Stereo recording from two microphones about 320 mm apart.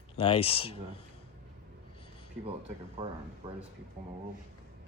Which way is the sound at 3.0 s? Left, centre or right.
Centre.